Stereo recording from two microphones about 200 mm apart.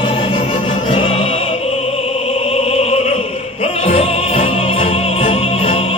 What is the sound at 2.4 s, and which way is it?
Opera, 30° left (ahead or behind).